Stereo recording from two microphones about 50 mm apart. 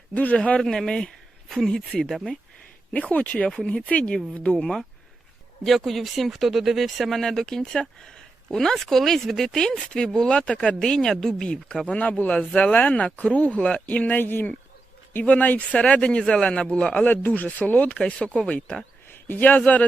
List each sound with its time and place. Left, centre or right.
0.1 s a man's voice: left
0.6 s speech: centre
2.9 s speech: left
4.5 s speech: centre
9.9 s speech: centre
11.9 s speech: left
14.2 s speech: left
15.3 s speech: left
15.7 s speech: left
17.1 s speech: left
19.0 s speech: left